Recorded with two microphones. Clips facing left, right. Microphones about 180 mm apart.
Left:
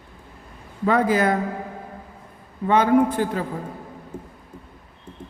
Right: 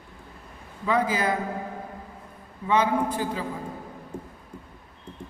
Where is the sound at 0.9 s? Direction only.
65° left (ahead or behind).